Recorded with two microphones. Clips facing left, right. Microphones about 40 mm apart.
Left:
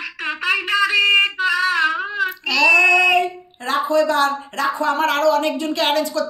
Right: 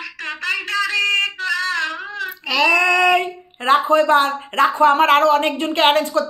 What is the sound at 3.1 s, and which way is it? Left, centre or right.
Speech, right.